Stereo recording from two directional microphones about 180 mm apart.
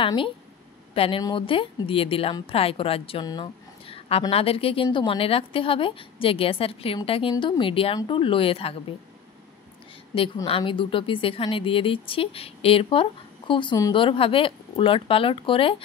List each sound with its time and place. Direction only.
0.0 s a woman's voice: 30° left (ahead or behind)
10.1 s a woman's voice: 30° left (ahead or behind)